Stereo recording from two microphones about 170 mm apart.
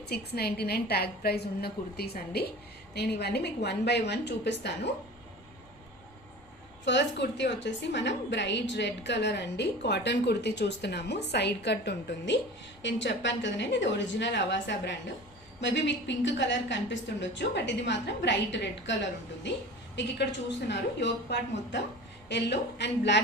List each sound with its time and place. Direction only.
0.1 s a woman's voice: 70° left (ahead or behind); by 4.7 s 90° left
6.8 s a woman's voice: 90° left